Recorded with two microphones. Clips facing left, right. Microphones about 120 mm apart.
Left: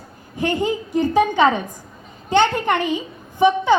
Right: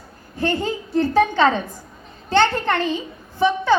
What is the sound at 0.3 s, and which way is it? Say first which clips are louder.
A woman's voice: left 2 dB; 15° left (ahead or behind).